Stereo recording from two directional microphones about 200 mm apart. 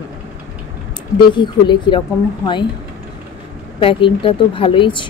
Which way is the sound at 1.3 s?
25° left (ahead or behind).